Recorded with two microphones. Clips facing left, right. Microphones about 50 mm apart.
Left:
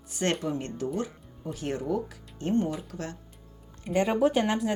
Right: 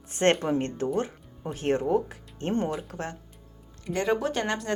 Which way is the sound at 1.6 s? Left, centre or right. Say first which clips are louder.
Right 6 dB; right.